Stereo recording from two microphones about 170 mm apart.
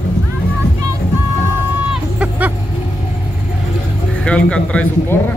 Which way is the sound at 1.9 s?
10° right (ahead or behind).